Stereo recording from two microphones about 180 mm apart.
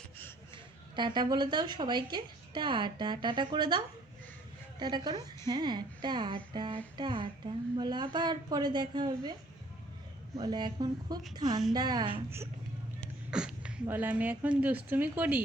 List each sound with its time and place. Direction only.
0.5 s a woman's voice: 25° right (ahead or behind)
10.4 s a woman's voice: 25° right (ahead or behind)